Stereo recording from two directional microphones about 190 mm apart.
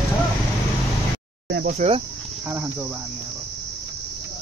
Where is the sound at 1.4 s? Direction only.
60° right (ahead or behind).